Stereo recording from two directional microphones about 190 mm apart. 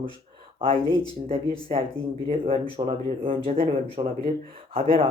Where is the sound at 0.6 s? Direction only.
30° right (ahead or behind).